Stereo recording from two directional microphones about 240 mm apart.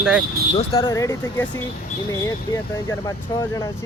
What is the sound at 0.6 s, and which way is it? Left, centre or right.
Speech, left.